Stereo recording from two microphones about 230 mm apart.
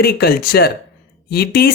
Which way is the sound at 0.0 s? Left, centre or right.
Left.